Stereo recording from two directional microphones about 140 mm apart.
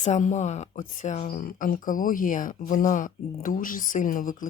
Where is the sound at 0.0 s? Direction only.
60° left (ahead or behind).